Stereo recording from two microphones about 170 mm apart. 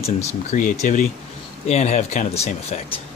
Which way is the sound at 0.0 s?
45° left (ahead or behind).